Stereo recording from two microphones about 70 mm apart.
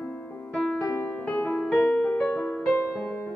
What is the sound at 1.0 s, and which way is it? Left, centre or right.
Music, centre.